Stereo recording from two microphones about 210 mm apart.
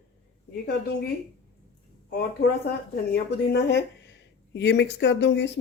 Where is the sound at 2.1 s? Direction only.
50° left (ahead or behind).